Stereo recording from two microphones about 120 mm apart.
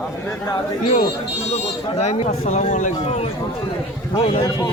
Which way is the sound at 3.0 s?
60° left (ahead or behind).